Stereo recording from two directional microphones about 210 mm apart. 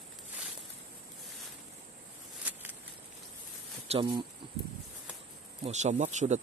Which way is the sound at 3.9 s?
25° right (ahead or behind).